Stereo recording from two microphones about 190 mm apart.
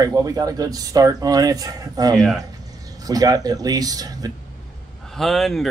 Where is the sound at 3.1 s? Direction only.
20° right (ahead or behind).